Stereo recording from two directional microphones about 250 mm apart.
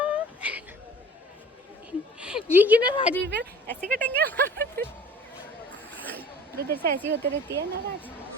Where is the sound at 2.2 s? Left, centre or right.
Centre.